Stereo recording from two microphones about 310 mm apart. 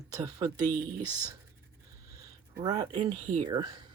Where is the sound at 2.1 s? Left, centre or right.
Centre.